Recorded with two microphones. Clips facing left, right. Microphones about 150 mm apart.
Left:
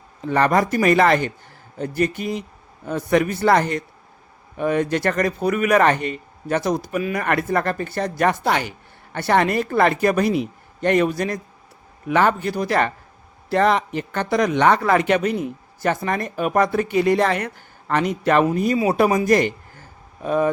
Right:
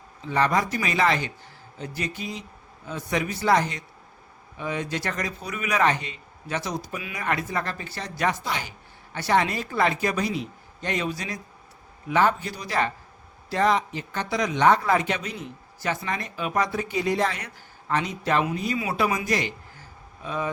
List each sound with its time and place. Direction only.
0.2 s speech: 55° left (ahead or behind)
18.4 s a man's voice: 45° left (ahead or behind)